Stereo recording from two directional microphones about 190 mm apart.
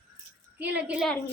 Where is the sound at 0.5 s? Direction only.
10° right (ahead or behind).